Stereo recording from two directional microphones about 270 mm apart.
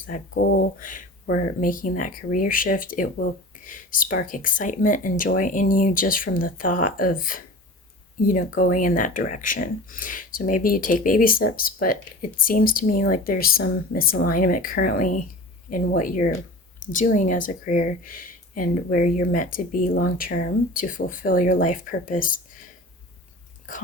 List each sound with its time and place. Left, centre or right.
0.1 s speech: left